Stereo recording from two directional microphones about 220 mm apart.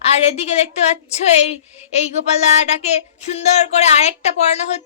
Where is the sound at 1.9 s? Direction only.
30° left (ahead or behind).